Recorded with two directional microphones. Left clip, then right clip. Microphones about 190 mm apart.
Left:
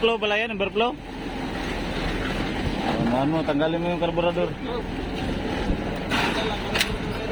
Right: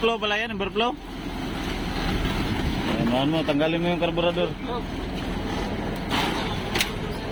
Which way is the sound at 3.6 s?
20° right (ahead or behind).